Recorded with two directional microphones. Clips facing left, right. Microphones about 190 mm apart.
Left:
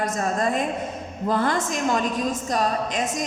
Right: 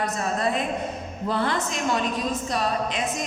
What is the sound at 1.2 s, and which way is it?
A woman's voice, 45° left (ahead or behind).